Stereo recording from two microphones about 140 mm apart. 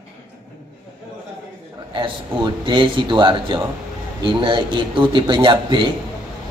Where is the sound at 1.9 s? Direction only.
35° right (ahead or behind).